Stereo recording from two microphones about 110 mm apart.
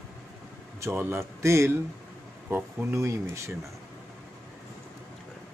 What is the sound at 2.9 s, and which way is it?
Speech, 25° right (ahead or behind).